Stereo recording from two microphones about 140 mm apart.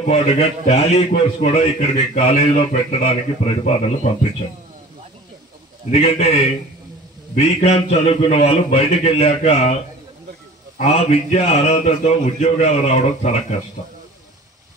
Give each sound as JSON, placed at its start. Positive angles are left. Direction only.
{"t": 0.0, "sound": "a man's voice", "side_deg": 50}
{"t": 5.9, "sound": "a man's voice", "side_deg": 50}
{"t": 10.8, "sound": "a man's voice", "side_deg": 50}